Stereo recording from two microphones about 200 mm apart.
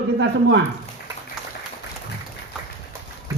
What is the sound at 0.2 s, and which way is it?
Speech, 60° right (ahead or behind).